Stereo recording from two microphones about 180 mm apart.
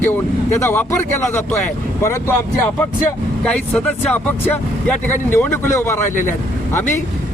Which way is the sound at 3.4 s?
5° left (ahead or behind).